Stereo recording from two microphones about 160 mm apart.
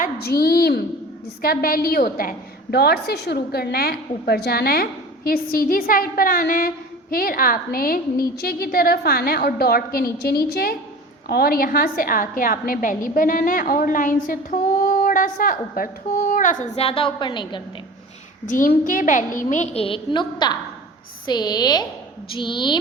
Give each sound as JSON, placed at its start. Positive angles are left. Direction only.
{"t": 0.0, "sound": "a woman's voice", "side_deg": 75}
{"t": 16.8, "sound": "a woman's voice", "side_deg": 35}
{"t": 18.4, "sound": "a woman's voice", "side_deg": 55}